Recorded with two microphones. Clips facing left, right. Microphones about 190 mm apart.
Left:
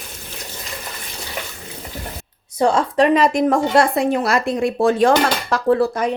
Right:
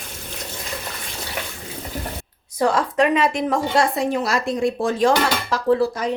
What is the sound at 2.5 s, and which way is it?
A woman's voice, 25° left (ahead or behind).